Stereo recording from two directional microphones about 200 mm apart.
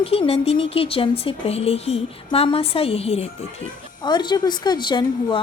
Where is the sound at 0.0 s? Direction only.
30° left (ahead or behind).